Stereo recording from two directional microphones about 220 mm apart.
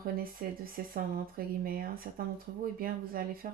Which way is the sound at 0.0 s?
40° right (ahead or behind).